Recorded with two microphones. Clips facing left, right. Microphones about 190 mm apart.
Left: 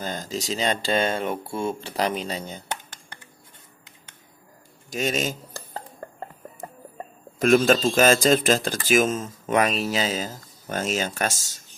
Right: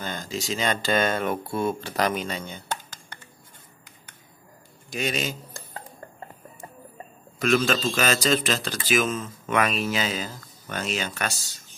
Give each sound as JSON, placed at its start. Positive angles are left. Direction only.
{"t": 0.0, "sound": "speech", "side_deg": 40}
{"t": 4.8, "sound": "a sound", "side_deg": 45}
{"t": 7.3, "sound": "speech", "side_deg": 50}